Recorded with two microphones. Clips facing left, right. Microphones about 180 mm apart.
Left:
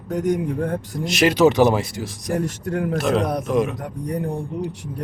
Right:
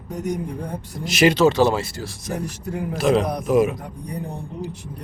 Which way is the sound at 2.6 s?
65° left (ahead or behind).